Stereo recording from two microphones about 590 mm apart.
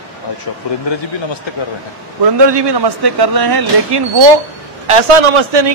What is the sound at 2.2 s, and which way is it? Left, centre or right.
Speech, right.